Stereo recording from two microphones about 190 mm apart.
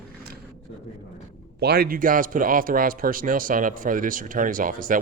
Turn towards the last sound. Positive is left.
turn(degrees=-45)  # may be behind; listen again after turning